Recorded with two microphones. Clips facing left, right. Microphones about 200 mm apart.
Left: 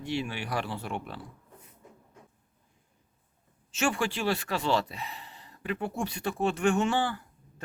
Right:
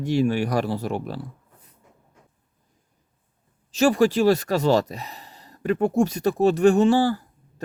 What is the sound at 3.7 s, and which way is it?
Speech, 35° right (ahead or behind).